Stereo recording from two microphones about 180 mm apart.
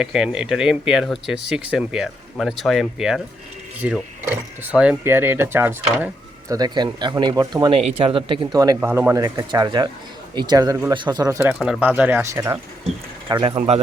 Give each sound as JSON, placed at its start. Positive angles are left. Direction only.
{"t": 0.0, "sound": "speech", "side_deg": -5}
{"t": 6.5, "sound": "speech", "side_deg": -25}
{"t": 8.9, "sound": "speech", "side_deg": -10}
{"t": 9.1, "sound": "speech", "side_deg": -20}
{"t": 11.6, "sound": "speech", "side_deg": -5}
{"t": 13.2, "sound": "speech", "side_deg": -25}